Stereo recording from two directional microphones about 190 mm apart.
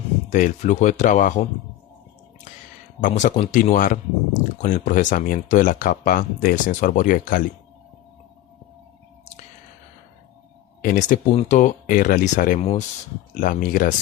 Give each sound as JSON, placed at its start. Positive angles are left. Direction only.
{"t": 0.3, "sound": "speech", "side_deg": 40}
{"t": 3.0, "sound": "speech", "side_deg": 40}
{"t": 10.8, "sound": "speech", "side_deg": 40}